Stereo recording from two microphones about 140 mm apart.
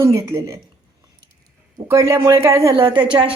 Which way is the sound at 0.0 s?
20° right (ahead or behind).